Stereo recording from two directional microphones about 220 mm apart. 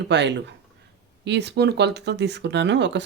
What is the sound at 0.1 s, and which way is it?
Speech, 50° right (ahead or behind).